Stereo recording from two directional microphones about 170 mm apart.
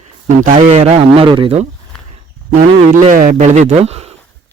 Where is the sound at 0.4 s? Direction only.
45° right (ahead or behind).